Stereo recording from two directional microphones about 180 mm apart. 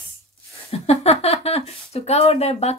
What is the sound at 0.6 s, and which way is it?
Speech, 35° left (ahead or behind).